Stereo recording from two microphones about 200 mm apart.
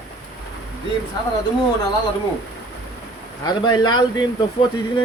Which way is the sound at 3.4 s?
20° left (ahead or behind).